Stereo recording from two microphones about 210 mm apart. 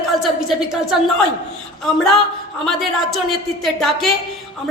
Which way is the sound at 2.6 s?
Centre (ahead or behind).